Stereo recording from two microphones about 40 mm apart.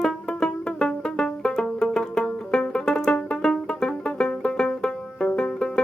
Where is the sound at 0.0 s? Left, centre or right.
Centre.